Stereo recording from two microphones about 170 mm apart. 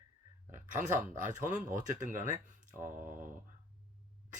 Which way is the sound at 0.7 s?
50° right (ahead or behind).